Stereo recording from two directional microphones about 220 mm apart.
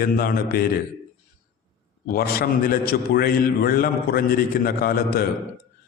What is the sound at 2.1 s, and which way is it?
A man's voice, 40° left (ahead or behind).